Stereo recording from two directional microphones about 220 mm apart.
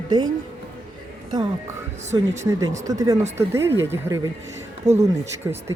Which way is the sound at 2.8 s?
15° right (ahead or behind).